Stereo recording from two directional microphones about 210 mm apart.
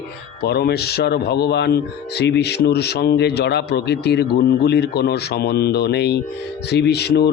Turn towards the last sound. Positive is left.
turn(degrees=50)  # may be behind; listen again after turning